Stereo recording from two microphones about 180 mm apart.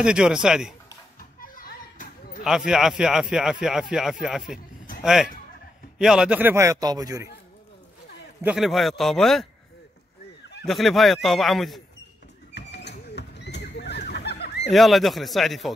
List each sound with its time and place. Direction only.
0.0 s a man's voice: 5° right (ahead or behind)
1.4 s a sound: 50° left (ahead or behind)
2.4 s a man's voice: 5° right (ahead or behind); by 7.2 s 20° right (ahead or behind)
8.4 s a man's voice: 5° right (ahead or behind)
10.6 s a man's voice: centre (ahead or behind)
12.5 s neigh: 70° left (ahead or behind)
14.7 s a man's voice: centre (ahead or behind)